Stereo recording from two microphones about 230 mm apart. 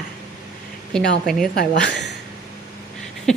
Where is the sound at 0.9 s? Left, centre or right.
Centre.